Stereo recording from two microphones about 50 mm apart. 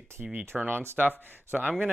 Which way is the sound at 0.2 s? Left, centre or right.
Centre.